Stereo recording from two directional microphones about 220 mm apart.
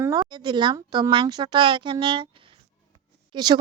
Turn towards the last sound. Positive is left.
turn(degrees=-20)  # may be behind; listen again after turning